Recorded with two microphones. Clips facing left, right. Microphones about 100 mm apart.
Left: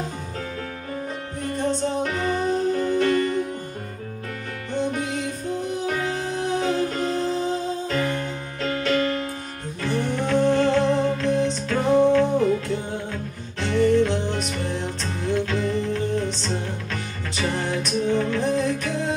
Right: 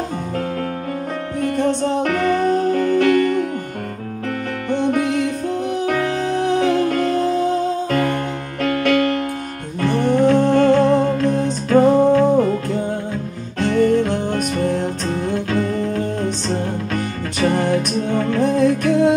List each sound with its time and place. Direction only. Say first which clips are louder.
1.4 s music: right 6 dB; 60° right (ahead or behind)
4.6 s music: right 7 dB; 60° right (ahead or behind)